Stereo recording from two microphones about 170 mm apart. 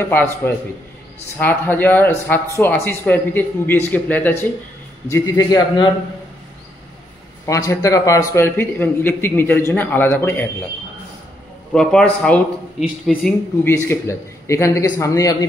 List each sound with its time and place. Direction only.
0.1 s a man's voice: 10° left (ahead or behind)
7.4 s speech: 20° left (ahead or behind)
11.7 s a man's voice: 5° left (ahead or behind)